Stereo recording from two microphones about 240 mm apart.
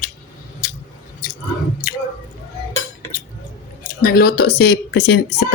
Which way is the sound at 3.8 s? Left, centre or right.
Left.